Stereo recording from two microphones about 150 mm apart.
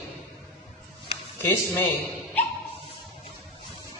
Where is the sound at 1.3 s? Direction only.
15° left (ahead or behind).